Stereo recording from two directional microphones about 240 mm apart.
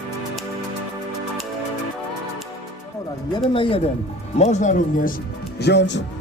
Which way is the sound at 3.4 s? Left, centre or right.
Left.